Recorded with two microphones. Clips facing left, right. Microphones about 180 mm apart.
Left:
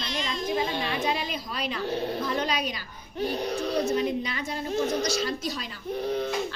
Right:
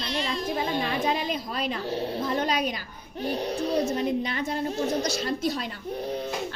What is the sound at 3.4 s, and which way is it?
Speech, 30° right (ahead or behind).